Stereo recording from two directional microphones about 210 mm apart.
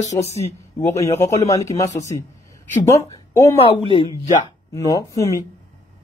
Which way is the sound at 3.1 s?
15° left (ahead or behind).